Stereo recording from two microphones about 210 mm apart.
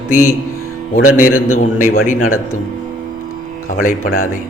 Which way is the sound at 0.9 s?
40° left (ahead or behind).